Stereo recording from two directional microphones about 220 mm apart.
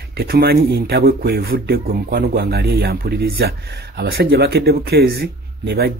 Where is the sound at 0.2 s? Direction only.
45° right (ahead or behind).